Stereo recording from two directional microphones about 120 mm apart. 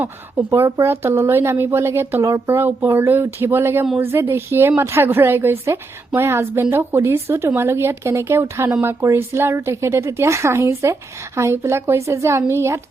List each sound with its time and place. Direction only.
0.0 s a woman's voice: 15° right (ahead or behind)